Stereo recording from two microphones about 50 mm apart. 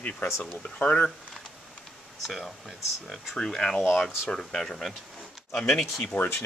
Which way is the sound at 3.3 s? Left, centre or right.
Centre.